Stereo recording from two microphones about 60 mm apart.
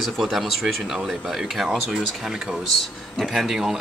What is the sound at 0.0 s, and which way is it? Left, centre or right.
Speech, centre.